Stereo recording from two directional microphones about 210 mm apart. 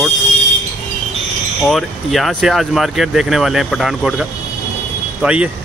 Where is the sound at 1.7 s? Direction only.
Centre (ahead or behind).